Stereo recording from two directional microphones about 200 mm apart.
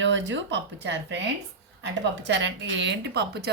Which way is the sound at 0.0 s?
65° right (ahead or behind).